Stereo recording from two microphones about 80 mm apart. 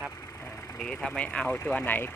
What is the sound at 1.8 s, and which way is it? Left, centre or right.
Speech, left.